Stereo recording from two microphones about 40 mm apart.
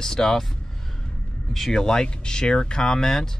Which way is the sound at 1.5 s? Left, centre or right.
Centre.